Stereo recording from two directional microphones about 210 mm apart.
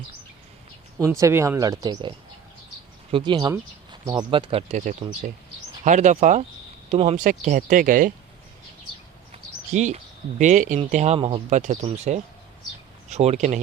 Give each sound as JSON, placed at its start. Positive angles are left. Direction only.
{"t": 1.2, "sound": "speech", "side_deg": -15}
{"t": 9.3, "sound": "speech", "side_deg": -35}